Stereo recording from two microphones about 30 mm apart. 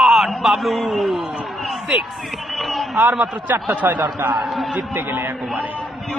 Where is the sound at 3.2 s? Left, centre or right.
Right.